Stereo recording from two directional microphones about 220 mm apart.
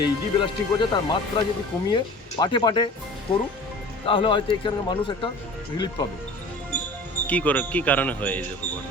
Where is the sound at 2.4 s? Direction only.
20° left (ahead or behind).